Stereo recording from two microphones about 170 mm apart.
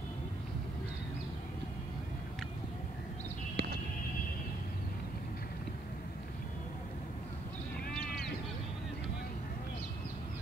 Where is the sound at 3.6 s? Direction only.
70° right (ahead or behind).